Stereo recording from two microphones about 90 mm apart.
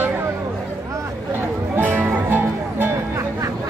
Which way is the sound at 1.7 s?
20° right (ahead or behind).